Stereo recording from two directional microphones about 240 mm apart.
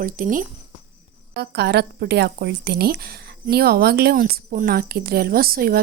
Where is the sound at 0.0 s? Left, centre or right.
Right.